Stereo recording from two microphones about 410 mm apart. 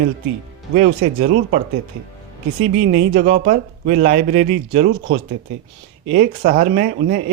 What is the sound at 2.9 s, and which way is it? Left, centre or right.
Speech, centre.